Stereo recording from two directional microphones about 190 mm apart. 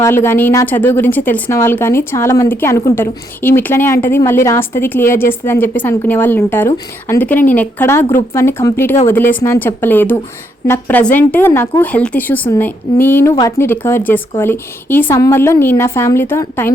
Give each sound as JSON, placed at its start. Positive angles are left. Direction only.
{"t": 0.0, "sound": "a woman's voice", "side_deg": 10}